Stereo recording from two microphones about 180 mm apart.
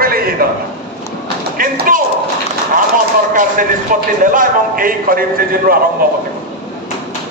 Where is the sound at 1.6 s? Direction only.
50° right (ahead or behind).